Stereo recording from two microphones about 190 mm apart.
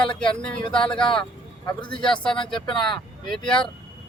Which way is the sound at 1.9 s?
5° left (ahead or behind).